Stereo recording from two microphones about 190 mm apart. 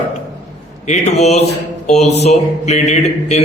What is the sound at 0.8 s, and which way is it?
Speech, 35° left (ahead or behind).